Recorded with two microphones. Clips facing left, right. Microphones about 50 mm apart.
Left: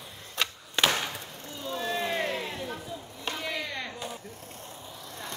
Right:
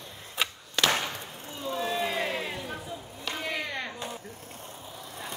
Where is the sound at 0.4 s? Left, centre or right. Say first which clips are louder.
Even; centre.